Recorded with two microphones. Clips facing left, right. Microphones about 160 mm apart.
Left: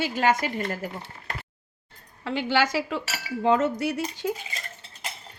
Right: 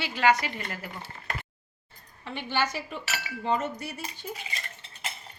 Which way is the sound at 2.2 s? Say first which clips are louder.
Left 6 dB; 90° left.